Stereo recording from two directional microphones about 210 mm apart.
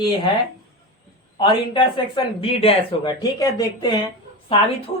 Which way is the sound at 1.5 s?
20° left (ahead or behind).